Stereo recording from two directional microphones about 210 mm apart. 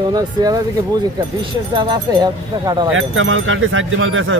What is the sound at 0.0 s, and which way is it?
Speech, 20° right (ahead or behind).